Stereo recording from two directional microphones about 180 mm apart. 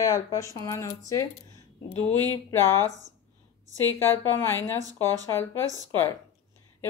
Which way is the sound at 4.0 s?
10° left (ahead or behind).